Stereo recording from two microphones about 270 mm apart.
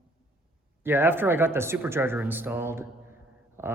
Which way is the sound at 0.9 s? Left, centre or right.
Centre.